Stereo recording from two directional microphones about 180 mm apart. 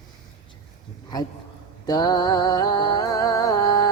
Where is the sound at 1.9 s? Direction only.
20° left (ahead or behind).